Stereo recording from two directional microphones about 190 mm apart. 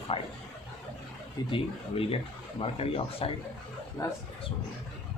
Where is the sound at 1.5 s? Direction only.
30° left (ahead or behind).